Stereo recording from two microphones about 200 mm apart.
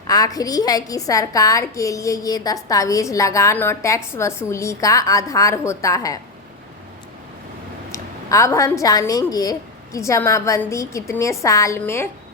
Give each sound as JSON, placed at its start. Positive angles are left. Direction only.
{"t": 0.1, "sound": "a woman's voice", "side_deg": 20}
{"t": 7.9, "sound": "a woman's voice", "side_deg": 15}